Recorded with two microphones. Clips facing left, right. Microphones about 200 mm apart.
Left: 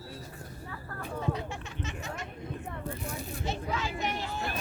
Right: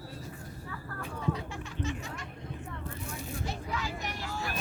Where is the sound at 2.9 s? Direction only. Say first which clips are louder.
Left 3 dB; 35° left (ahead or behind).